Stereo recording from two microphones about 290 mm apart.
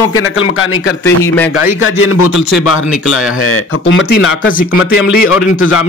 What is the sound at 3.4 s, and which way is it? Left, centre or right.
Speech, left.